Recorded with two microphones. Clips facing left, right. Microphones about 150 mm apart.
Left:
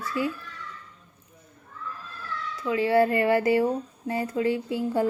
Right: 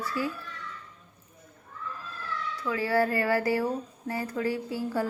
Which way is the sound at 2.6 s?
20° left (ahead or behind).